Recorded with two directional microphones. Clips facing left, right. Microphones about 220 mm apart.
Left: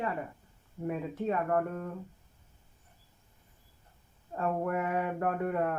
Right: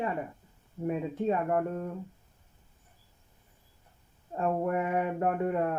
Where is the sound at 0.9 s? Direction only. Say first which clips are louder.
Right 3 dB; 25° right (ahead or behind).